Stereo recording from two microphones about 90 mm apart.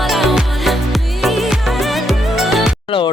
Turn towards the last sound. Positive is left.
turn(degrees=70)  # may be behind; listen again after turning